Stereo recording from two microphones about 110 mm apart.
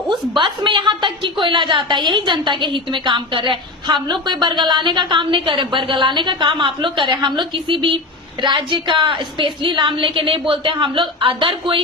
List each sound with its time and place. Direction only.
0.1 s a woman's voice: 50° right (ahead or behind)